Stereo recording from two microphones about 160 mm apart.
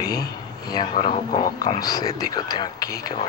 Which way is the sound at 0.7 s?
25° left (ahead or behind).